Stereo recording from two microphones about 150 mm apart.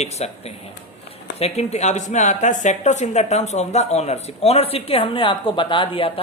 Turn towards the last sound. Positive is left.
turn(degrees=35)  # may be behind; listen again after turning